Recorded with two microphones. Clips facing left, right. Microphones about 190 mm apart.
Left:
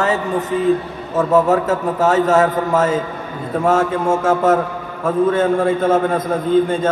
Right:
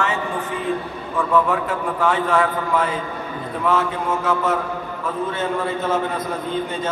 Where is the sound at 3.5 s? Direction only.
45° left (ahead or behind).